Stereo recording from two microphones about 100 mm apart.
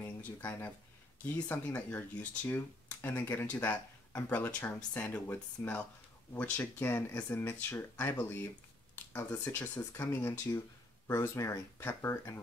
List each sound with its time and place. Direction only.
0.0 s speech: 20° left (ahead or behind)